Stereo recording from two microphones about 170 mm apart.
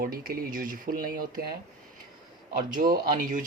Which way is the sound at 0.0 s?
60° right (ahead or behind).